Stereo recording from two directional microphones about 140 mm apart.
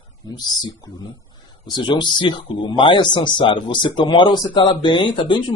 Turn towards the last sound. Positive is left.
turn(degrees=35)  # may be behind; listen again after turning